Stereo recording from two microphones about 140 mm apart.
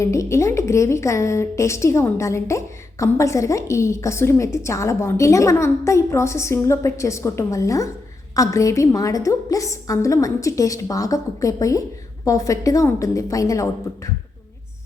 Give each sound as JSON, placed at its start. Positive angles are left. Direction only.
{"t": 0.0, "sound": "a woman's voice", "side_deg": 20}